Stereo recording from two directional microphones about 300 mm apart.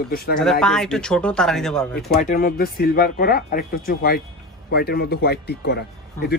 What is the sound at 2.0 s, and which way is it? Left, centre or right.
Speech, left.